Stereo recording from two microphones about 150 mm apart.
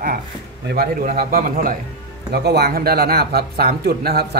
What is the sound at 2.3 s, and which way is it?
Speech, 90° right.